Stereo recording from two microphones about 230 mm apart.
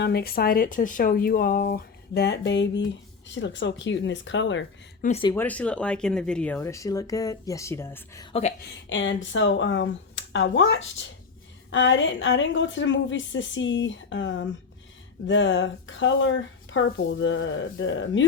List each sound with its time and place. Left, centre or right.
0.0 s speech: left
5.0 s speech: left
5.3 s speech: centre
8.3 s speech: left
8.9 s speech: left